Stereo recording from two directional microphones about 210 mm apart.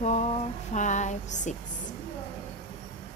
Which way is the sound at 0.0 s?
35° left (ahead or behind).